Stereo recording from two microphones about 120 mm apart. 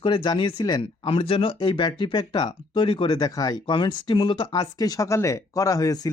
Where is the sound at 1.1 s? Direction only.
50° left (ahead or behind).